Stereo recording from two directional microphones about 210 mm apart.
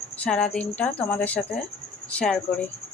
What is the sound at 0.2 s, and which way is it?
Speech, 5° left (ahead or behind).